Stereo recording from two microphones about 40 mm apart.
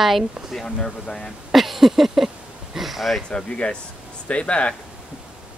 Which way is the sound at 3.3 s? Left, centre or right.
Left.